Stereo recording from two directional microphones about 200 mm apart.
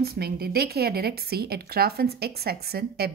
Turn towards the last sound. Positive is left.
turn(degrees=-50)  # may be behind; listen again after turning